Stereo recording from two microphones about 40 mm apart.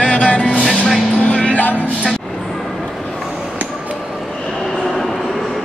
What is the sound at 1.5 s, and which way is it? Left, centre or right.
Music, left.